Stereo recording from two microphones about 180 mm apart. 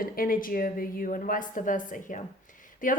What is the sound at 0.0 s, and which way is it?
A woman's voice, 50° left (ahead or behind).